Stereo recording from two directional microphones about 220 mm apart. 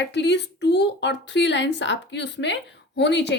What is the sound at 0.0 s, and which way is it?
Speech, 50° left (ahead or behind).